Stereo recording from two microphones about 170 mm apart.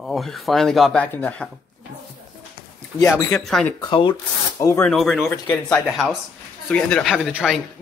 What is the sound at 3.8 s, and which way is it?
Speech, 25° left (ahead or behind).